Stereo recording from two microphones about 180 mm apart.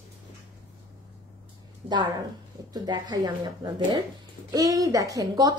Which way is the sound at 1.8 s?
35° right (ahead or behind).